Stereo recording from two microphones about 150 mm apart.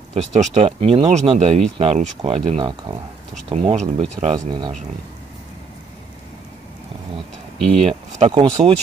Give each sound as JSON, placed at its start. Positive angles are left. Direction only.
{"t": 0.1, "sound": "speech", "side_deg": -50}
{"t": 7.5, "sound": "speech", "side_deg": 0}
{"t": 8.3, "sound": "speech", "side_deg": -35}